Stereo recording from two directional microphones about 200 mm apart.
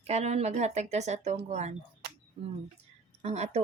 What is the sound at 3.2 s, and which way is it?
Speech, 30° right (ahead or behind).